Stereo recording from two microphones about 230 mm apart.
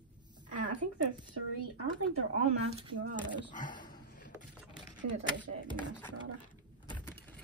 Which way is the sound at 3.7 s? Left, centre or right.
Left.